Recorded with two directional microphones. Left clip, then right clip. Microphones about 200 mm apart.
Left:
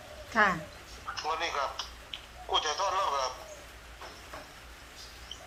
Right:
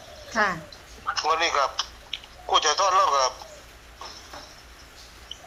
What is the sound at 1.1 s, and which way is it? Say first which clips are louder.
A man's voice: right 10 dB; 55° right (ahead or behind).